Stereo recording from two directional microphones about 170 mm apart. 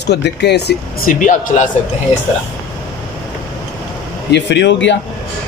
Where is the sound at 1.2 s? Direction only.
50° left (ahead or behind).